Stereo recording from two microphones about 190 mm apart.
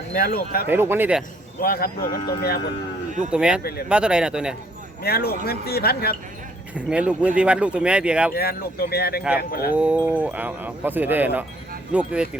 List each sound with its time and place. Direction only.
0.1 s speech: 50° left (ahead or behind)
0.7 s speech: 10° right (ahead or behind)
1.6 s speech: 50° left (ahead or behind)
2.0 s speech: 20° left (ahead or behind)
3.1 s speech: 40° right (ahead or behind)
3.3 s speech: 5° right (ahead or behind)
3.6 s speech: 55° left (ahead or behind)
3.8 s speech: 5° right (ahead or behind)
5.0 s speech: 55° left (ahead or behind)
6.7 s speech: 5° right (ahead or behind)
8.3 s speech: 55° left (ahead or behind)
9.7 s speech: 5° right (ahead or behind)